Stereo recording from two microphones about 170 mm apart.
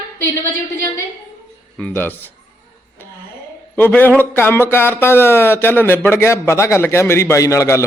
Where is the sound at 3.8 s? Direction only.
10° left (ahead or behind).